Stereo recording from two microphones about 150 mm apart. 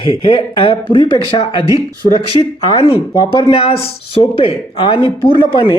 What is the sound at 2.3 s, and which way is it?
A man's voice, 35° left (ahead or behind).